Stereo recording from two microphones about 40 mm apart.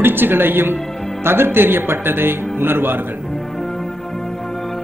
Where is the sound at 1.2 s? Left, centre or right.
Right.